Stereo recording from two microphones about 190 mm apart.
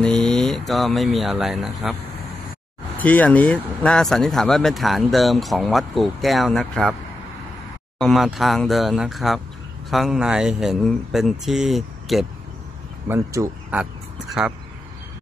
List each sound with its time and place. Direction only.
0.0 s speech: 5° left (ahead or behind)
3.0 s speech: 10° left (ahead or behind)
8.0 s speech: centre (ahead or behind)
13.1 s speech: 15° right (ahead or behind)